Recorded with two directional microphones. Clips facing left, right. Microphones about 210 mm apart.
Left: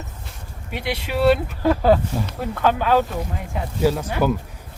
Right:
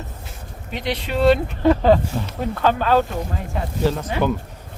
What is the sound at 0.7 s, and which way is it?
Speech, 10° left (ahead or behind).